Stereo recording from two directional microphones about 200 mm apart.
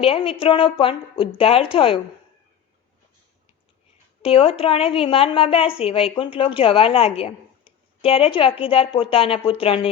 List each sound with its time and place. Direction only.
0.0 s a woman's voice: 30° left (ahead or behind)
4.2 s a woman's voice: 30° left (ahead or behind)